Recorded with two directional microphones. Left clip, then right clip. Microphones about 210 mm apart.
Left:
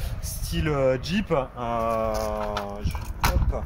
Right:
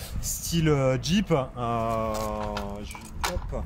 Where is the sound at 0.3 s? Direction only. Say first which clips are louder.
Right 3 dB; 40° right (ahead or behind).